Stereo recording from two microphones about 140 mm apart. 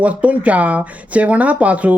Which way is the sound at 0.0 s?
10° right (ahead or behind).